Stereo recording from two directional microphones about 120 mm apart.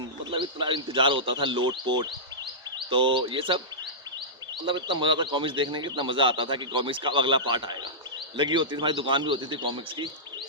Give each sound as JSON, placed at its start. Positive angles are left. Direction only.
{"t": 0.3, "sound": "speech", "side_deg": -45}
{"t": 4.6, "sound": "speech", "side_deg": -40}